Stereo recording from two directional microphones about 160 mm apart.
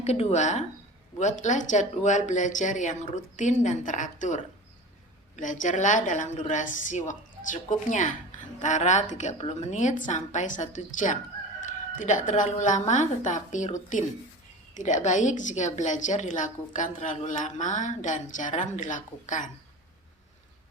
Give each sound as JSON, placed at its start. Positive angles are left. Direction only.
{"t": 0.0, "sound": "a woman's voice", "side_deg": 40}
{"t": 5.4, "sound": "a woman's voice", "side_deg": 50}